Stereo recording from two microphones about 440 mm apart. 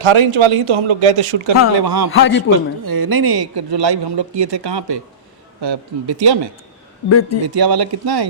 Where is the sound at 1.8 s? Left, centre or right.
Right.